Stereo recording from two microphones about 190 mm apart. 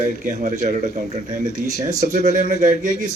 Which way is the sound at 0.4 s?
40° right (ahead or behind).